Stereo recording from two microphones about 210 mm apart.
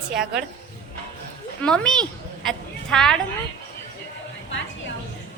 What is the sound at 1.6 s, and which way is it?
A woman's voice, 5° left (ahead or behind).